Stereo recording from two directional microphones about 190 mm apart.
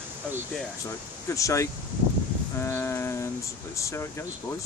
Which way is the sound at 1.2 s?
15° left (ahead or behind).